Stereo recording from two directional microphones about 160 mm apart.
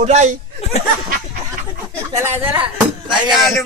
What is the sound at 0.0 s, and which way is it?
Speech, 45° right (ahead or behind).